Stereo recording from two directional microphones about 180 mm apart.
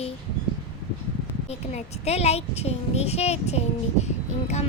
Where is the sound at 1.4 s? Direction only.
35° left (ahead or behind).